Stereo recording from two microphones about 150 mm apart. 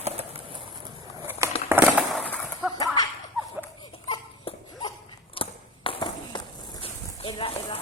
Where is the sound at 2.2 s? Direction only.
10° left (ahead or behind).